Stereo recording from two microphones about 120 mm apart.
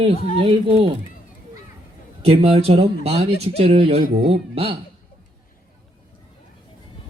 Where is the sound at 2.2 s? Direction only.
55° right (ahead or behind).